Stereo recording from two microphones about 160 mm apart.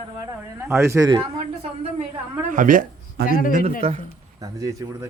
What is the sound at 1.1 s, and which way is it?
Speech, 35° right (ahead or behind).